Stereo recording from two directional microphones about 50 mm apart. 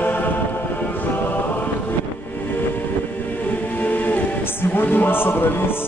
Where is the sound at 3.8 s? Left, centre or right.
Left.